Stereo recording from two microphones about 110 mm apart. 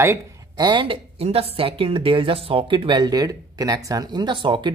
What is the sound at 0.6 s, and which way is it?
A woman's voice, 45° right (ahead or behind).